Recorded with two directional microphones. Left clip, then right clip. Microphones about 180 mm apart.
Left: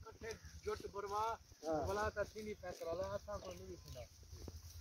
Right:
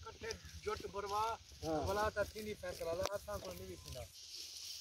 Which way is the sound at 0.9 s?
40° right (ahead or behind).